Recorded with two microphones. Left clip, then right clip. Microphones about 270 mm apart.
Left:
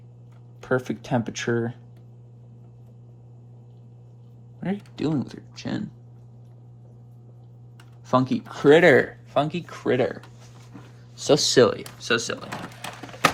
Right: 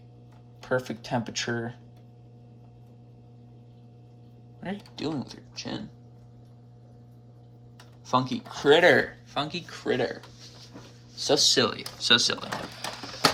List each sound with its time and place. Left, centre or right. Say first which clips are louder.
0.6 s speech: left 3 dB; centre
4.6 s speech: left 5 dB; centre
5.0 s speech: left 6 dB; left
5.5 s speech: left 3 dB; left
8.1 s speech: left 4 dB; left
8.4 s speech: left 4 dB; left
11.2 s speech: left 3 dB; left
11.9 s speech: right 3 dB; centre